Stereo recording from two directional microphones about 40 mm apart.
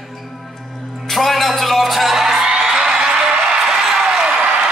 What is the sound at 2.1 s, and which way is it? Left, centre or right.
Music, centre.